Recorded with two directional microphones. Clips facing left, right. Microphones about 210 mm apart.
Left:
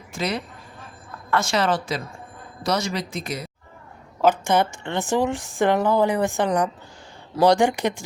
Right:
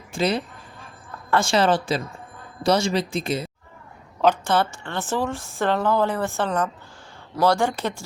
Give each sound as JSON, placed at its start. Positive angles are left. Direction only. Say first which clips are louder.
{"t": 0.1, "sound": "speech", "louder": "right 4 dB", "side_deg": -30}
{"t": 4.2, "sound": "a woman's voice", "louder": "left 1 dB", "side_deg": 10}